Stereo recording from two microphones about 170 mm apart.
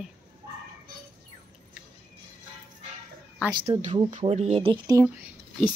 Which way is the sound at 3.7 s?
45° right (ahead or behind).